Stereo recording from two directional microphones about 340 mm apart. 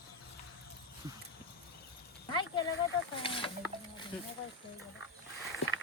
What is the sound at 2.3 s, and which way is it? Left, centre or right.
Speech, centre.